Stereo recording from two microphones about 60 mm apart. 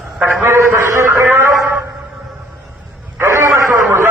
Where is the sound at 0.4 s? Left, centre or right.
Right.